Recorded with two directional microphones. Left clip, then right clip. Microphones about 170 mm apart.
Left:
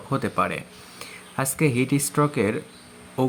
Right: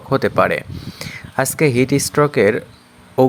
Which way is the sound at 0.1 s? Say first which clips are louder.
Right 9 dB; 35° right (ahead or behind).